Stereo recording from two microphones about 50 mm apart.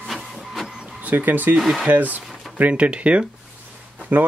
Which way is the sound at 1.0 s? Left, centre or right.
Right.